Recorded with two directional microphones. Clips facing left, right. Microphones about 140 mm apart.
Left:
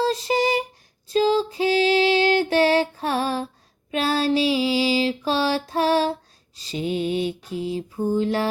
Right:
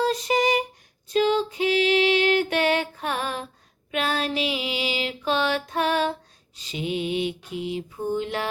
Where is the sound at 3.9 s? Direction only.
35° left (ahead or behind).